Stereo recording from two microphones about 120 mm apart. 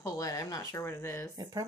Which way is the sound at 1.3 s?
30° right (ahead or behind).